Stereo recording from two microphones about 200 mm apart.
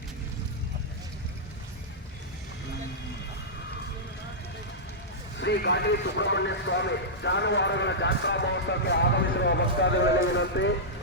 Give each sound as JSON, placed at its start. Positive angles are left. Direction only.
{"t": 5.4, "sound": "speech", "side_deg": 60}